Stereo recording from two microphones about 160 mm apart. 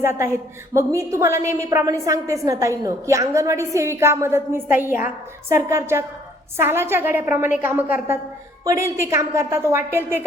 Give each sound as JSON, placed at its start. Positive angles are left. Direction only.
{"t": 0.0, "sound": "a woman's voice", "side_deg": -15}